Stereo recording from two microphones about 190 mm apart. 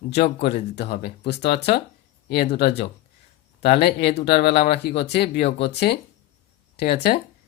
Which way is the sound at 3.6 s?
55° left (ahead or behind).